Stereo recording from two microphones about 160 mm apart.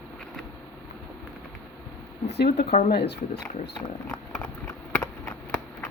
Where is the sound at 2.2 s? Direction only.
90° left.